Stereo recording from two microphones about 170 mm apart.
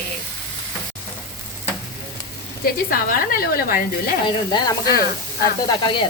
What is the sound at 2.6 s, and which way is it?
Speech, 60° left (ahead or behind).